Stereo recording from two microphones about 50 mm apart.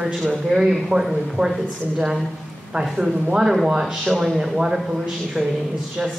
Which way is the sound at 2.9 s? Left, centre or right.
Centre.